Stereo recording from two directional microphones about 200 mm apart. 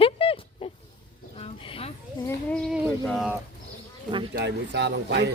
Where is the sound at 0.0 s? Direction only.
30° left (ahead or behind).